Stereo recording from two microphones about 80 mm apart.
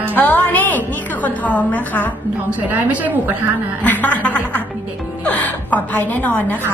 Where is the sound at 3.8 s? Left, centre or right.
Centre.